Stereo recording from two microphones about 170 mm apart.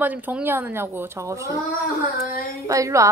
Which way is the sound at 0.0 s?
10° right (ahead or behind).